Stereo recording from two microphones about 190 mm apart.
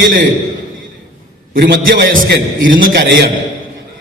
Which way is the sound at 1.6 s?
60° right (ahead or behind).